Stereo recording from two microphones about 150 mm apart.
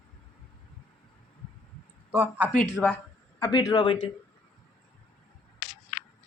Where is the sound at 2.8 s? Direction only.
5° left (ahead or behind).